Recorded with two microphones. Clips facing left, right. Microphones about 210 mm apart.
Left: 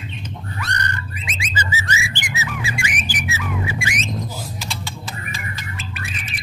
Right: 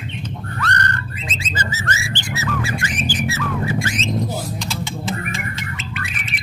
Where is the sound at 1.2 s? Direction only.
15° left (ahead or behind).